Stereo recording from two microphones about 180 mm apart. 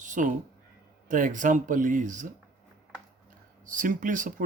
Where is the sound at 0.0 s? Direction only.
45° right (ahead or behind).